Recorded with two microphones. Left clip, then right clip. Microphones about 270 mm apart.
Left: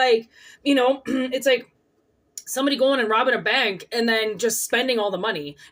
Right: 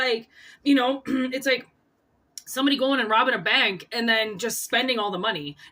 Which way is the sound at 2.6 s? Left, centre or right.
Right.